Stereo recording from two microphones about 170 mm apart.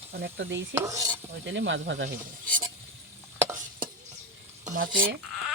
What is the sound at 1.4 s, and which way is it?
Speech, 90° right.